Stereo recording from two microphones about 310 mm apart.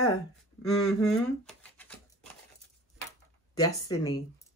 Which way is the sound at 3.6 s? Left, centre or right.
Centre.